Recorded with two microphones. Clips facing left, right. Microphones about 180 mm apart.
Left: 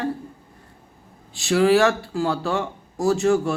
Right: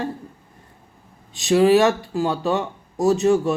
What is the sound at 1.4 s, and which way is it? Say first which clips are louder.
Speech: right 2 dB; 20° right (ahead or behind).